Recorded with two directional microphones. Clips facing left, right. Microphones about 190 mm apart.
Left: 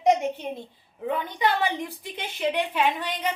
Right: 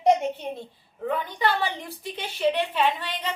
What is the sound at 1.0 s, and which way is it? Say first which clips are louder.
A woman's voice: even; 20° left (ahead or behind).